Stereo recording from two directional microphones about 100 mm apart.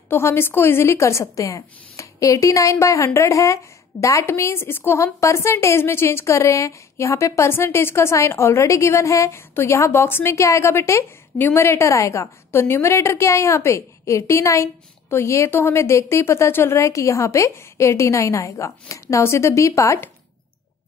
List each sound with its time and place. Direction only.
0.1 s a woman's voice: 25° left (ahead or behind)